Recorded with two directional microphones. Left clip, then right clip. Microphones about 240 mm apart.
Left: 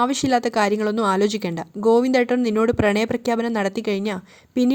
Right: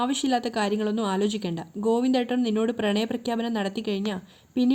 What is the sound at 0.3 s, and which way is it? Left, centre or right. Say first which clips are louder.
A woman's voice: left 7 dB; left.